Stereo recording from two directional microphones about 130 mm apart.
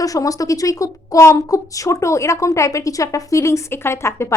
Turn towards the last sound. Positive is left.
turn(degrees=20)  # may be behind; listen again after turning